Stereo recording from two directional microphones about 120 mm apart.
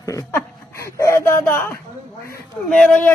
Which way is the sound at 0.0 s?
30° left (ahead or behind).